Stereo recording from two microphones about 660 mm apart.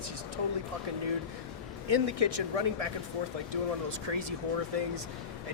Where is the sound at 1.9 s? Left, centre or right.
Right.